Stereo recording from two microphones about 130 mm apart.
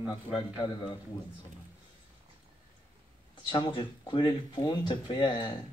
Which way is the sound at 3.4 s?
35° left (ahead or behind).